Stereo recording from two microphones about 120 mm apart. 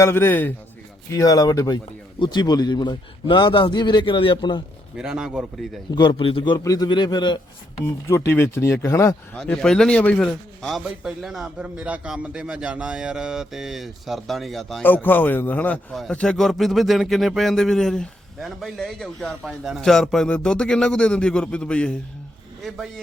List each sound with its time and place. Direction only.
0.0 s speech: 20° left (ahead or behind)
1.1 s a man's voice: 30° left (ahead or behind)
4.9 s a man's voice: 5° right (ahead or behind)
5.9 s a man's voice: 40° left (ahead or behind)
8.0 s speech: 20° left (ahead or behind)
9.3 s speech: 5° left (ahead or behind)
14.8 s speech: 15° left (ahead or behind)